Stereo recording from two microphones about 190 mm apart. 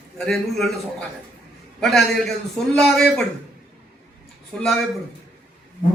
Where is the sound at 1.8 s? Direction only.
Centre (ahead or behind).